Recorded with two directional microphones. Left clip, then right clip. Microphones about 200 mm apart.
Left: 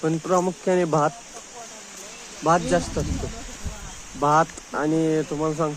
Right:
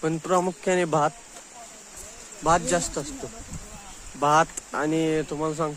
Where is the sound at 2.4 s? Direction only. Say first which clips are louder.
Left 2 dB; 20° right (ahead or behind).